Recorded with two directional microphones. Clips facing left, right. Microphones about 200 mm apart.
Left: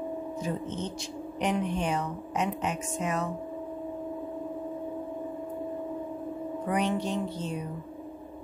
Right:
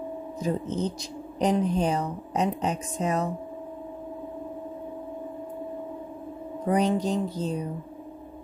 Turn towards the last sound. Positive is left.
turn(degrees=-35)  # may be behind; listen again after turning